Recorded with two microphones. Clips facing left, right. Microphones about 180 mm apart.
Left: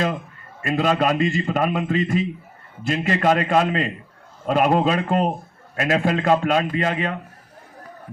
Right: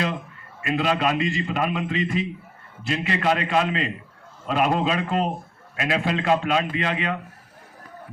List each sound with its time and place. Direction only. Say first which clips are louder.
0.6 s a man's voice: left 3 dB; 45° left (ahead or behind)